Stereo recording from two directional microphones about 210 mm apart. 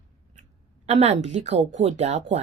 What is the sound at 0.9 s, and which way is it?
Speech, 30° right (ahead or behind).